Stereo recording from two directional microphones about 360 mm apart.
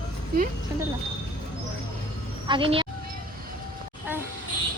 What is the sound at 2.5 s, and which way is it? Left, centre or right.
Speech, centre.